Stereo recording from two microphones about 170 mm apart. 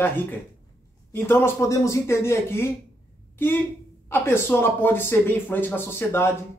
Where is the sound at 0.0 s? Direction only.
10° left (ahead or behind).